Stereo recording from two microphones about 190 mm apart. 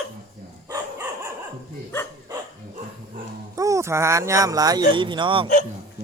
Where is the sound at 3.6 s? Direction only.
15° right (ahead or behind).